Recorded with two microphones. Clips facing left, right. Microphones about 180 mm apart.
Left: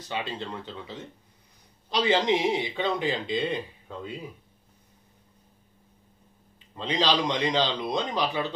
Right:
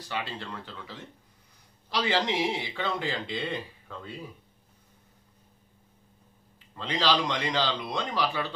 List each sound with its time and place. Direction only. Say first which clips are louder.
0.0 s speech: left 2 dB; 20° left (ahead or behind)
6.7 s speech: left 1 dB; 20° left (ahead or behind)